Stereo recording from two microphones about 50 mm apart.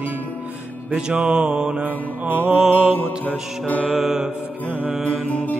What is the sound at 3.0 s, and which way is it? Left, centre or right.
Music, left.